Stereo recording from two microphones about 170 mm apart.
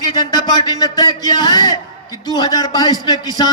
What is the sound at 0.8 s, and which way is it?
A man's voice, 25° left (ahead or behind).